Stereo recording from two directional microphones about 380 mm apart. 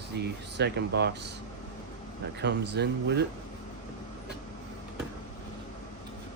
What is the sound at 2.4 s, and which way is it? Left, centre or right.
Speech, right.